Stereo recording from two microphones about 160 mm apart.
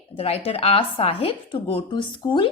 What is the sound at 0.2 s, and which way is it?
Speech, 40° left (ahead or behind).